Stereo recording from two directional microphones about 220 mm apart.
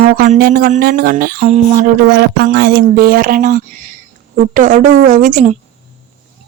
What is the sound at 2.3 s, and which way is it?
Speech, 45° right (ahead or behind).